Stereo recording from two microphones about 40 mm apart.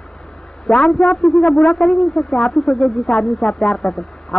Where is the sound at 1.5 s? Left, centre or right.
Left.